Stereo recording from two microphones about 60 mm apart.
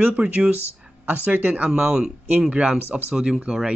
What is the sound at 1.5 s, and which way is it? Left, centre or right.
Speech, centre.